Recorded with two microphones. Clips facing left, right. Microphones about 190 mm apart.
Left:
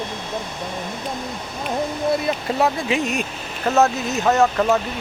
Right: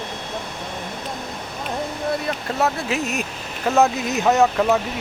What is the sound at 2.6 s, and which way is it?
Speech, centre (ahead or behind).